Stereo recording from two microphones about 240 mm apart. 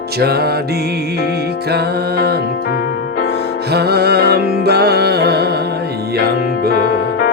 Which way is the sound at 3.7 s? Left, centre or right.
Right.